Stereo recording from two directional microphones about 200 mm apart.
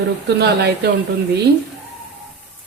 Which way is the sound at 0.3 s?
55° right (ahead or behind).